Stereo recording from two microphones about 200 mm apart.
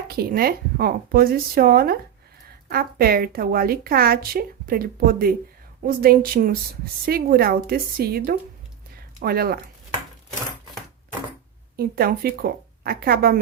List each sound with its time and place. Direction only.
0.1 s a woman's voice: 50° right (ahead or behind)
11.8 s a woman's voice: 50° right (ahead or behind)